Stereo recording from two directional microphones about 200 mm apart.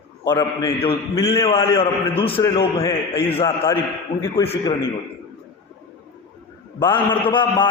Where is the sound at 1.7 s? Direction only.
25° left (ahead or behind).